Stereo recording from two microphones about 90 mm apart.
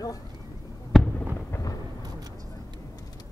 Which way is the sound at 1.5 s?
35° left (ahead or behind).